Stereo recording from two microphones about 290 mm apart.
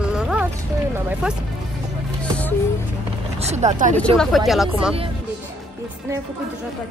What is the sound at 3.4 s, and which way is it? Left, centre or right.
Speech, right.